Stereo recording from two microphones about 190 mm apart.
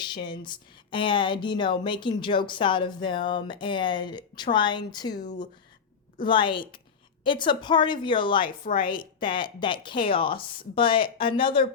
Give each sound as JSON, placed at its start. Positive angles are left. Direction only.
{"t": 0.1, "sound": "speech", "side_deg": 25}
{"t": 6.2, "sound": "speech", "side_deg": 25}